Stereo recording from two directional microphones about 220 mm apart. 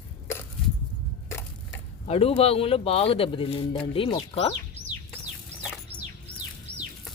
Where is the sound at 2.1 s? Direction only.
25° left (ahead or behind).